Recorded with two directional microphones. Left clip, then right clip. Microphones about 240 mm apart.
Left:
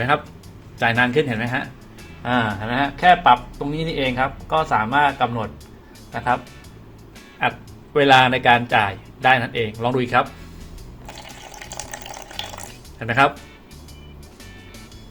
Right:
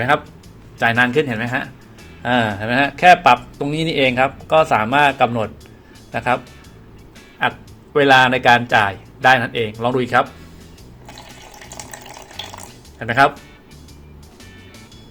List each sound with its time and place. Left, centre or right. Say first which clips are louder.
0.8 s a man's voice: right 2 dB; centre; by 6.4 s right
7.4 s a man's voice: right 2 dB; centre
11.9 s a sound: left 1 dB; centre
13.0 s a man's voice: right 3 dB; centre